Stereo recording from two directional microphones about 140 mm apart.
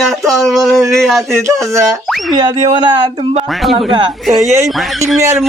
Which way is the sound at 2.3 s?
30° right (ahead or behind).